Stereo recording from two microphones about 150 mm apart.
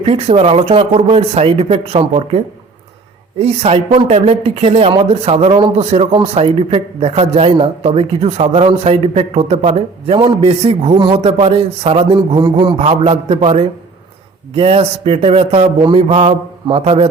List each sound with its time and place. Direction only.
0.0 s speech: 40° right (ahead or behind)
10.9 s a man's voice: 30° right (ahead or behind)
12.8 s a man's voice: 45° right (ahead or behind)
16.0 s a man's voice: 45° right (ahead or behind)